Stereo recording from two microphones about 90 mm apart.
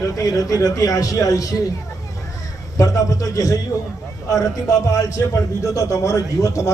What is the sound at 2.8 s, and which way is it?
A man's voice, 40° left (ahead or behind).